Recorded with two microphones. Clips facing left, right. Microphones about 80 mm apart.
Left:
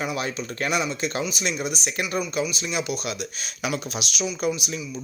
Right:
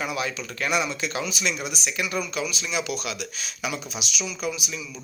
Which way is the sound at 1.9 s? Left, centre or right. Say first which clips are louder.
Right 2 dB; left.